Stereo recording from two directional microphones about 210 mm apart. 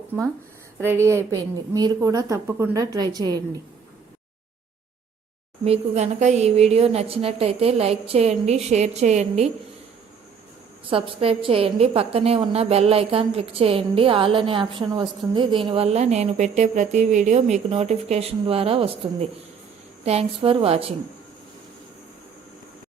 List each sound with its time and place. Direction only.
0.8 s a woman's voice: 10° right (ahead or behind)
5.6 s a woman's voice: 30° right (ahead or behind)
10.8 s a woman's voice: 25° right (ahead or behind)
20.1 s a woman's voice: 25° right (ahead or behind)